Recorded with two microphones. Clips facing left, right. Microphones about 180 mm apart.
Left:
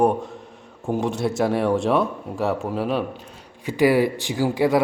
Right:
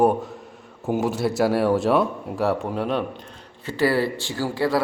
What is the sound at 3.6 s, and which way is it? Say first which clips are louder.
Speech: left 3 dB; 15° left (ahead or behind).